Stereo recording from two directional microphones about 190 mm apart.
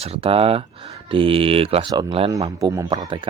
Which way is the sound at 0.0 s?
30° right (ahead or behind).